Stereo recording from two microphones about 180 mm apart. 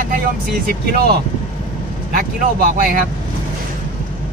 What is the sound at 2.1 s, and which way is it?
Speech, 50° right (ahead or behind).